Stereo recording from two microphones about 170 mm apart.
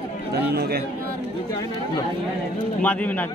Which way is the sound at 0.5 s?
70° right (ahead or behind).